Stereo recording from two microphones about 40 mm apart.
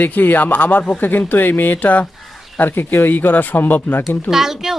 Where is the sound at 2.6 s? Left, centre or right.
Left.